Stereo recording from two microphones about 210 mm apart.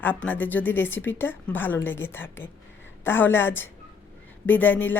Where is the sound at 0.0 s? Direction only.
10° left (ahead or behind).